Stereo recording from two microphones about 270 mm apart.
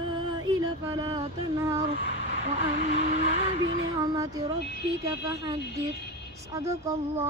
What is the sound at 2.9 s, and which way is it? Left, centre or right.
Vehicle, right.